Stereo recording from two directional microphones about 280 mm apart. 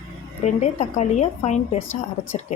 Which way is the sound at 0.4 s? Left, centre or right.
Left.